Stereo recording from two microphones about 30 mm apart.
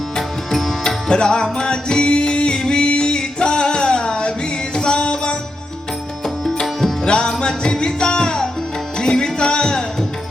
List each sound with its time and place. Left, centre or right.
0.5 s tabla: centre
1.1 s music: left
6.6 s music: centre